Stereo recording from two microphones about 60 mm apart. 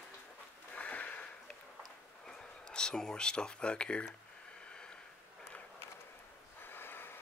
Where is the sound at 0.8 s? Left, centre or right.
Left.